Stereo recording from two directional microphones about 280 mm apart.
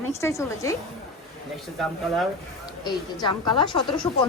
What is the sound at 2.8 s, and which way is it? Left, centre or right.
A woman's voice, centre.